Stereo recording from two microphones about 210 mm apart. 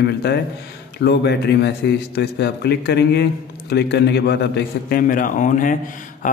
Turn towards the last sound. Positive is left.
turn(degrees=40)  # may be behind; listen again after turning